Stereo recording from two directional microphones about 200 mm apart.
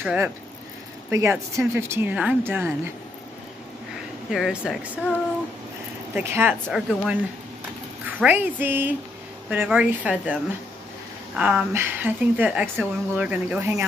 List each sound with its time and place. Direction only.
0.0 s a woman's voice: 5° right (ahead or behind)
4.3 s speech: 5° right (ahead or behind)
6.1 s a woman's voice: 10° right (ahead or behind)
8.2 s a woman's voice: 10° right (ahead or behind)
11.3 s a woman's voice: 5° right (ahead or behind)